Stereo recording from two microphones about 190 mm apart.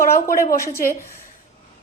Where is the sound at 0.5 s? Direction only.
15° left (ahead or behind).